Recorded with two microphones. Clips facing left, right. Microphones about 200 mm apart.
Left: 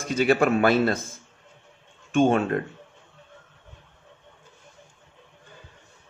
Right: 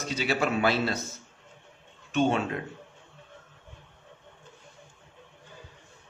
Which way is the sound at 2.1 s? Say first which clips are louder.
Left 5 dB; 50° left (ahead or behind).